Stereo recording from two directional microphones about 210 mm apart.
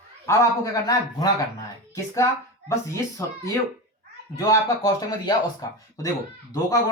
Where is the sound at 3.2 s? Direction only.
15° left (ahead or behind).